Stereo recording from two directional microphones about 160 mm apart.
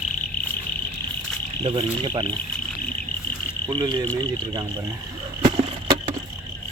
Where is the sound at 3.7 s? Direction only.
25° right (ahead or behind).